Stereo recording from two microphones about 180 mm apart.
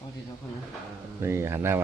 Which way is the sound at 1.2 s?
15° right (ahead or behind).